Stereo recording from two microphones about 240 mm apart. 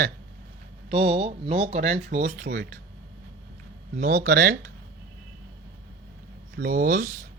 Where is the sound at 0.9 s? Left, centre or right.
Right.